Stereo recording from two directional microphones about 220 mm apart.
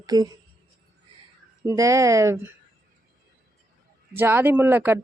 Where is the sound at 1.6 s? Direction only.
15° right (ahead or behind).